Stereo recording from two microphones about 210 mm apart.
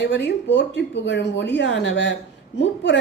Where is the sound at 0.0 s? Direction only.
55° left (ahead or behind).